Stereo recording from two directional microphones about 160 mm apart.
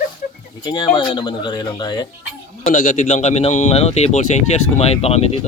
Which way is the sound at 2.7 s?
60° left (ahead or behind).